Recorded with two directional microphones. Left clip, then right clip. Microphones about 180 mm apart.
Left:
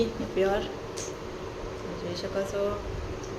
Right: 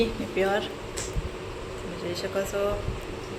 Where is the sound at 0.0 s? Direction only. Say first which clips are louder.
Right 1 dB; 5° left (ahead or behind).